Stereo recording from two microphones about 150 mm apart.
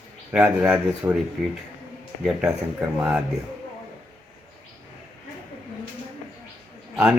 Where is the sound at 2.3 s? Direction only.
10° right (ahead or behind).